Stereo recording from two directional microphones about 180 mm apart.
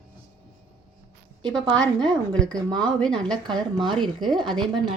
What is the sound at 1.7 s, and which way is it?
A woman's voice, 25° right (ahead or behind).